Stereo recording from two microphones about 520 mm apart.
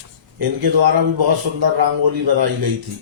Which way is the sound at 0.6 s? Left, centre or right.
Right.